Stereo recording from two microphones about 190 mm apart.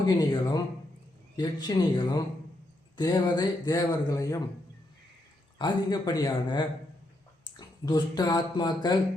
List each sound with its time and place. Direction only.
0.0 s speech: 20° left (ahead or behind)
5.5 s speech: 20° left (ahead or behind)